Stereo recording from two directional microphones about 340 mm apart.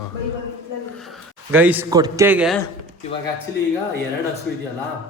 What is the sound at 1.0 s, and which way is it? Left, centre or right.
A man's voice, centre.